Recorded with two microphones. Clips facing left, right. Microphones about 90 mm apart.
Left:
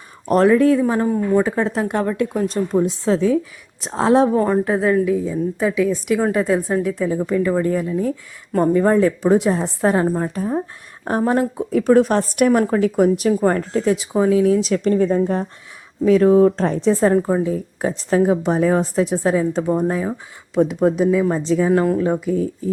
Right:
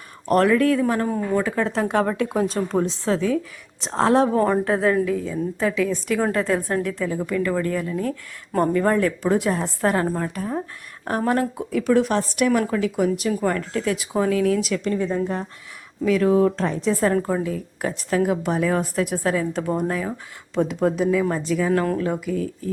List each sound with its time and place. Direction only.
0.3 s a woman's voice: 20° left (ahead or behind)
1.8 s speech: centre (ahead or behind)
3.0 s a woman's voice: 20° left (ahead or behind)
3.8 s a woman's voice: 10° left (ahead or behind)
4.4 s a woman's voice: 5° left (ahead or behind)
7.1 s a woman's voice: 25° left (ahead or behind)
11.7 s a woman's voice: 40° left (ahead or behind)
14.1 s a woman's voice: 15° left (ahead or behind)
14.7 s a woman's voice: 45° left (ahead or behind)
16.0 s a woman's voice: 30° left (ahead or behind)
21.7 s a woman's voice: 15° left (ahead or behind)